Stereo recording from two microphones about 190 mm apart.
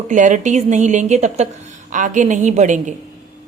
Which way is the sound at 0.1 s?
40° right (ahead or behind).